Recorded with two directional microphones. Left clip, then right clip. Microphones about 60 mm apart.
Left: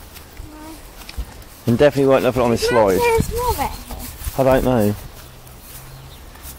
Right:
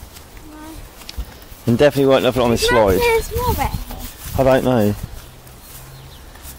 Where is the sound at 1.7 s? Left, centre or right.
Right.